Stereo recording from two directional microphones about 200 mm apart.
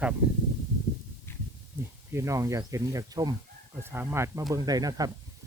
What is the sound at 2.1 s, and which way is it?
Speech, 15° right (ahead or behind).